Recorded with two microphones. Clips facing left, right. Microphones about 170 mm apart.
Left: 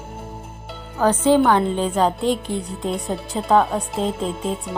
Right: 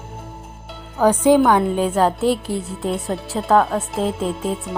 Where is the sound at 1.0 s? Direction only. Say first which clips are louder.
Right 2 dB; 10° right (ahead or behind).